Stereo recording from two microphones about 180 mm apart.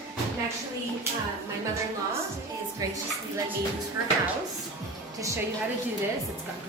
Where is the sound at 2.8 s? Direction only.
20° right (ahead or behind).